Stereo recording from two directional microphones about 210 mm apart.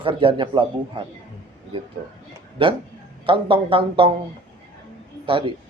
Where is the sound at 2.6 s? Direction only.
25° right (ahead or behind).